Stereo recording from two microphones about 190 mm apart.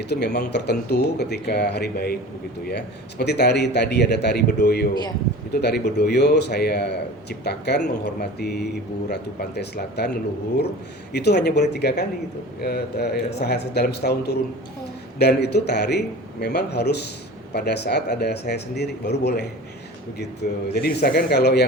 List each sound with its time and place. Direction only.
0.0 s speech: 60° left (ahead or behind)
11.1 s speech: 60° left (ahead or behind)